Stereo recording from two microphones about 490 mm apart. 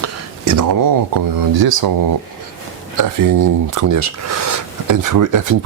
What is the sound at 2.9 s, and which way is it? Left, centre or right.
Speech, right.